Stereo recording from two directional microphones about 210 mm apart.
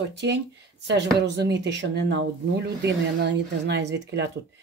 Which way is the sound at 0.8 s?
55° right (ahead or behind).